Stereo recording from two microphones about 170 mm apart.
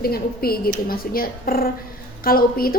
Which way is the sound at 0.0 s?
65° left (ahead or behind).